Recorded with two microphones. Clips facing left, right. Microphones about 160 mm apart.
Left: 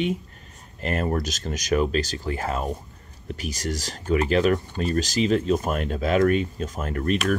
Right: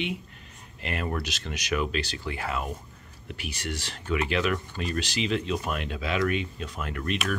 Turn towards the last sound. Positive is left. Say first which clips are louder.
# left 6 dB
turn(degrees=40)  # may be behind; listen again after turning